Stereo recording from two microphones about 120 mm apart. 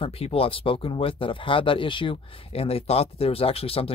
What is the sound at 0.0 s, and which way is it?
Speech, 55° left (ahead or behind).